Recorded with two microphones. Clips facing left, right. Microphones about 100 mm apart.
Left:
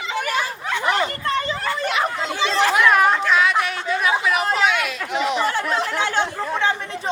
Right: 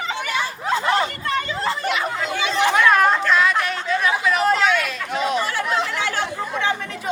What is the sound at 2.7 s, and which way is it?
Chatter, 5° left (ahead or behind).